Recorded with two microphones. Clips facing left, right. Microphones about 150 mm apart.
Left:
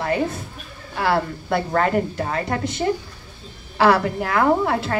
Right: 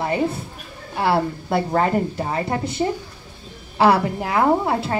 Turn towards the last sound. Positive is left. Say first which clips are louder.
# even
turn(degrees=-25)  # may be behind; listen again after turning